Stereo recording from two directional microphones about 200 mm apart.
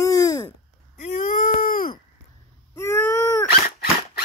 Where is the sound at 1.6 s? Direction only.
45° left (ahead or behind).